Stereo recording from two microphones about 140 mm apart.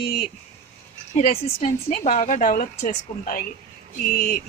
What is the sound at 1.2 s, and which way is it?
A woman's voice, 50° left (ahead or behind).